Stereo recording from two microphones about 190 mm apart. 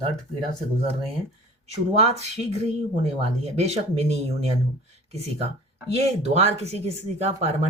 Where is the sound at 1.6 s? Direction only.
35° right (ahead or behind).